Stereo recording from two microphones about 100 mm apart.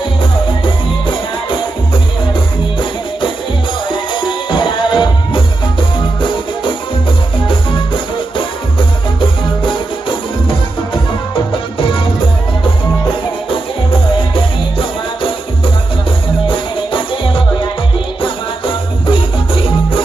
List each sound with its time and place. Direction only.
0.2 s music: 55° left (ahead or behind)
3.9 s music: 55° left (ahead or behind)
14.1 s music: 60° left (ahead or behind)